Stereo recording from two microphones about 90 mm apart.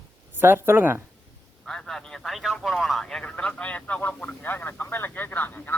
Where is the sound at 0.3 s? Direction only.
25° right (ahead or behind).